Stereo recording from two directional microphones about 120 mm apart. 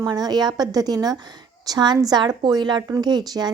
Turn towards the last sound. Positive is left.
turn(degrees=-35)  # may be behind; listen again after turning